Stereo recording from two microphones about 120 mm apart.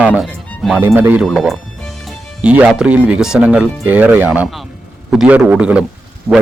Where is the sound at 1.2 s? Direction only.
Centre (ahead or behind).